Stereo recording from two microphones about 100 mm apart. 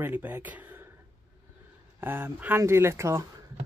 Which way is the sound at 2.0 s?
20° right (ahead or behind).